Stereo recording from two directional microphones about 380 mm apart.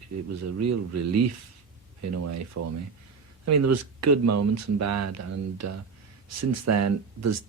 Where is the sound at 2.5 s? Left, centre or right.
Right.